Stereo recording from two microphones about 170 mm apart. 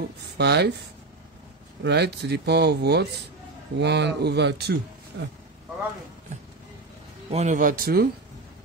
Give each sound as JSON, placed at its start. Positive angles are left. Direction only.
{"t": 0.4, "sound": "speech", "side_deg": -75}
{"t": 1.8, "sound": "speech", "side_deg": -75}
{"t": 7.2, "sound": "speech", "side_deg": -40}